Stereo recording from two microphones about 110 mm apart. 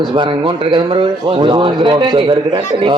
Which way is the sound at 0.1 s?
50° right (ahead or behind).